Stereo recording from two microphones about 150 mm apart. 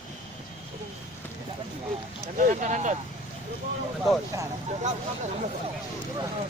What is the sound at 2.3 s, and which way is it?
Speech, 55° right (ahead or behind).